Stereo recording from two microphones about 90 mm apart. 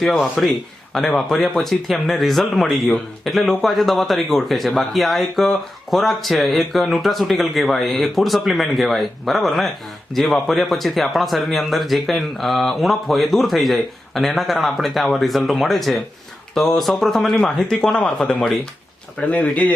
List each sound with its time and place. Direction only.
0.0 s speech: centre (ahead or behind)